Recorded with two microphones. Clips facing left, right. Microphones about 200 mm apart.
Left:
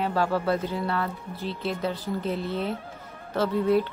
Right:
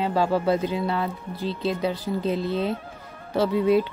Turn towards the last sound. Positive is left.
turn(degrees=-15)  # may be behind; listen again after turning